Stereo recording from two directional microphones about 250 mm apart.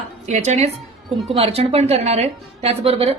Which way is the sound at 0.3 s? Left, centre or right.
Right.